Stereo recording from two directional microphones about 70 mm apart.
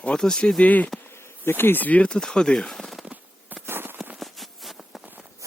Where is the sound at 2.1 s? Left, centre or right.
Centre.